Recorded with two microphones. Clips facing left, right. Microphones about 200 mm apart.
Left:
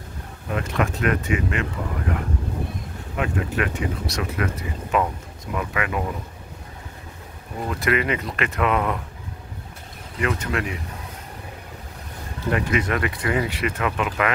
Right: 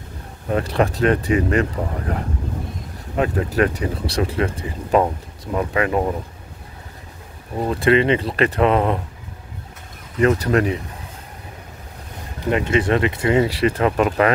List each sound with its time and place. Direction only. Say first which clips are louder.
0.5 s speech: right 5 dB; 35° right (ahead or behind)
7.6 s speech: right 7 dB; 30° right (ahead or behind)
10.2 s speech: right 8 dB; 35° right (ahead or behind)
12.4 s speech: right 4 dB; 25° right (ahead or behind)